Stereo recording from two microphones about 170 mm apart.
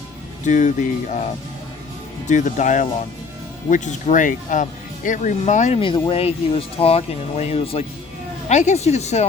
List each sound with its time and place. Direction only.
0.4 s speech: 45° left (ahead or behind)
2.2 s speech: 45° left (ahead or behind)
5.8 s speech: 30° left (ahead or behind)